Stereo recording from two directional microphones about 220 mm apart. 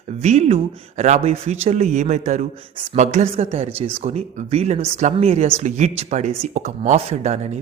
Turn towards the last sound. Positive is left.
turn(degrees=-30)  # may be behind; listen again after turning